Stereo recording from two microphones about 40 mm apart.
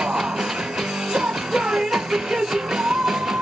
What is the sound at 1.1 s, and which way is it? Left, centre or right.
Music, centre.